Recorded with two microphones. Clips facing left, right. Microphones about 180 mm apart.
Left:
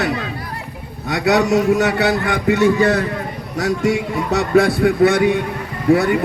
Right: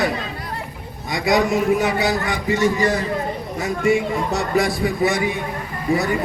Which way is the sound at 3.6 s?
75° left (ahead or behind).